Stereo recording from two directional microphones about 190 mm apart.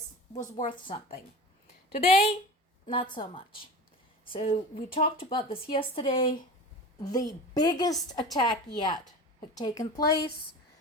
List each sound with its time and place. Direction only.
0.9 s a woman's voice: 30° left (ahead or behind)